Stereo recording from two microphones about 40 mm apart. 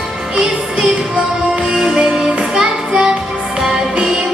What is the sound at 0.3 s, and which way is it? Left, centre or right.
Music, centre.